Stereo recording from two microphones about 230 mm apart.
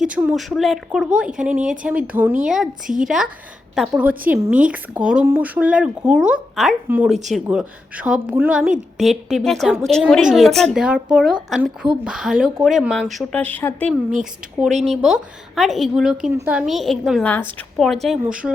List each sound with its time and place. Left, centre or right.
0.0 s speech: centre
2.8 s speech: right
3.8 s speech: centre